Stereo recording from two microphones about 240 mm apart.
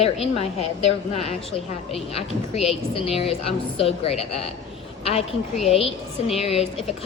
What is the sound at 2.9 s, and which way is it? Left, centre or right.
A woman's voice, left.